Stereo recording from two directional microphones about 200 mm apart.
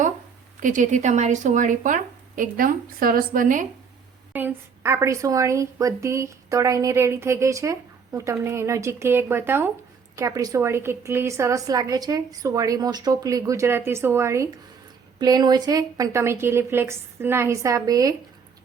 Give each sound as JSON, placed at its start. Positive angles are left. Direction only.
{"t": 0.6, "sound": "a woman's voice", "side_deg": -40}
{"t": 4.3, "sound": "speech", "side_deg": -10}